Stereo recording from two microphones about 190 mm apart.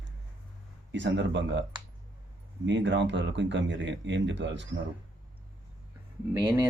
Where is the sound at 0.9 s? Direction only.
70° right (ahead or behind).